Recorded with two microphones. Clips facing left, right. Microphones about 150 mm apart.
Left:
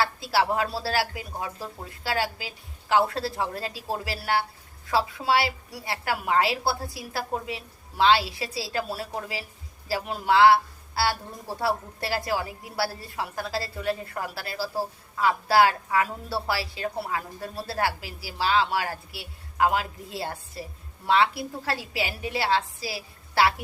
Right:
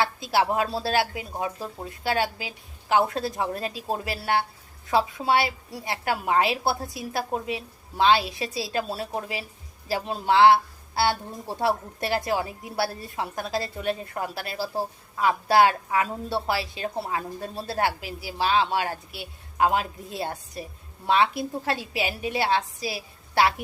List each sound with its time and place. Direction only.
0.0 s speech: 20° right (ahead or behind)